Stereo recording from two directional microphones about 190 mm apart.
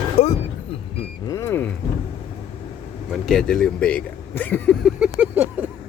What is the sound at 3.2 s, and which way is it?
Speech, 5° left (ahead or behind).